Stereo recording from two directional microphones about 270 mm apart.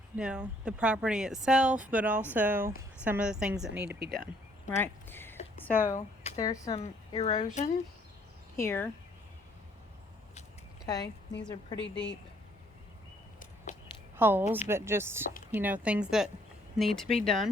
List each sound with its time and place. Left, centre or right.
0.2 s a woman's voice: centre
3.8 s speech: right
4.8 s speech: centre
8.5 s speech: centre
10.8 s speech: centre
11.8 s speech: left
14.2 s a woman's voice: centre